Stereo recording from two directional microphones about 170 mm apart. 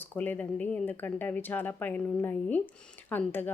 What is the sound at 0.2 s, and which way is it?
A woman's voice, 10° left (ahead or behind).